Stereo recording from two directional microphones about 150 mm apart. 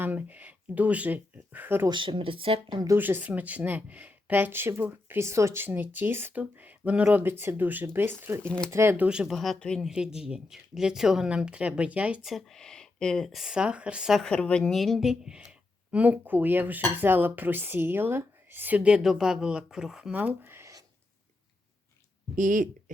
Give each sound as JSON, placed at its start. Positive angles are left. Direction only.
{"t": 0.0, "sound": "speech", "side_deg": -10}
{"t": 1.9, "sound": "speech", "side_deg": -35}
{"t": 2.8, "sound": "speech", "side_deg": -15}
{"t": 8.4, "sound": "speech", "side_deg": 5}
{"t": 8.7, "sound": "speech", "side_deg": -15}
{"t": 9.0, "sound": "speech", "side_deg": -5}
{"t": 22.4, "sound": "speech", "side_deg": -60}